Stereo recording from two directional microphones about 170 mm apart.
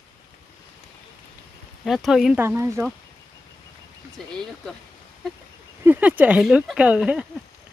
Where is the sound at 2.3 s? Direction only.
15° right (ahead or behind).